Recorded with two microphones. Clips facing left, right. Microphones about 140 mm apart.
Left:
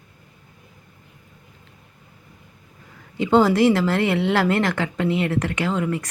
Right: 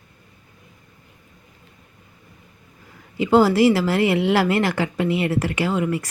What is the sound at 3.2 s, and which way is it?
Speech, 5° right (ahead or behind).